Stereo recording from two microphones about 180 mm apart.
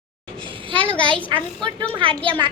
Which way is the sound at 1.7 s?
30° right (ahead or behind).